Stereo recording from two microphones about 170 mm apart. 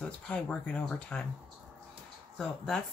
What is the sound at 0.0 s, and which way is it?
Speech, 5° left (ahead or behind).